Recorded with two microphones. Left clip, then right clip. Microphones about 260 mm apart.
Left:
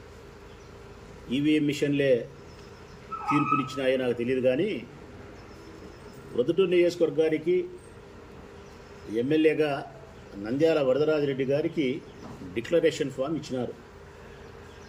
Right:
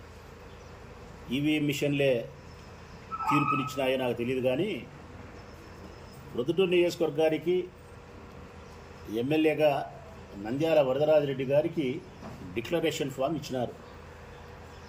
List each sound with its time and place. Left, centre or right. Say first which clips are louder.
1.3 s speech: left 3 dB; centre
3.2 s speech: left 2 dB; centre
6.3 s speech: left 3 dB; centre
9.1 s speech: left 3 dB; centre